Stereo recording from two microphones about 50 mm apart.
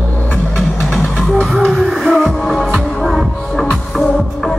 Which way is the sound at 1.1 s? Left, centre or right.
Centre.